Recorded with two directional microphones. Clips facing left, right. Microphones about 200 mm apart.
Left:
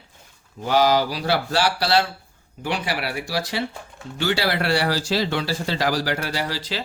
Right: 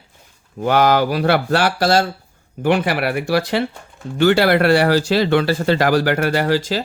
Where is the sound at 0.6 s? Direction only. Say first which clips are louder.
Right 4 dB; 60° right (ahead or behind).